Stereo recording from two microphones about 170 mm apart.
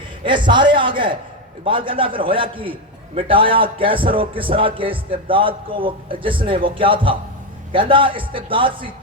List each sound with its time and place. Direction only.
0.3 s a man's voice: 25° right (ahead or behind)